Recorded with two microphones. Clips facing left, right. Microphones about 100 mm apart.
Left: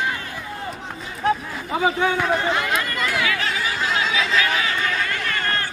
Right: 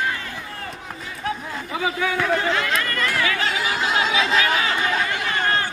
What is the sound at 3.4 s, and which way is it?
Chatter, 25° right (ahead or behind).